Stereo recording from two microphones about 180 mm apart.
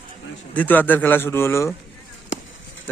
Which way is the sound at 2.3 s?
90° left.